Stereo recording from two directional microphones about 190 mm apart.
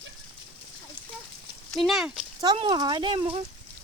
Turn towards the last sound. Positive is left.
turn(degrees=-25)  # may be behind; listen again after turning